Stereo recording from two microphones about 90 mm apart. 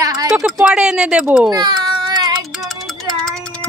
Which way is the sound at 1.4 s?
50° right (ahead or behind).